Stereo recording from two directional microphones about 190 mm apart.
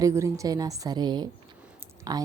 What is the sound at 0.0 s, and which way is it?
A woman's voice, 15° right (ahead or behind).